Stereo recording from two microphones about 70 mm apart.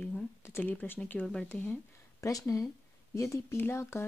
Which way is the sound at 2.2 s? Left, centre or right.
Left.